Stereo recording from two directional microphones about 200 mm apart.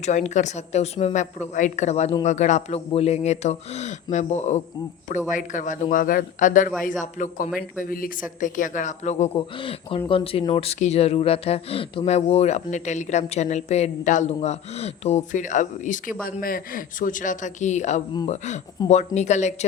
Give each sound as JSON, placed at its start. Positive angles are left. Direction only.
{"t": 0.0, "sound": "speech", "side_deg": 35}